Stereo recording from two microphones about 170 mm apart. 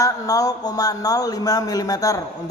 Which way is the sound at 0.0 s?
20° left (ahead or behind).